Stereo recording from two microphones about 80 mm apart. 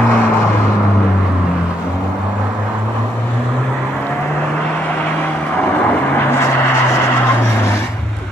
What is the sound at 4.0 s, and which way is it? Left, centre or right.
Vehicle, centre.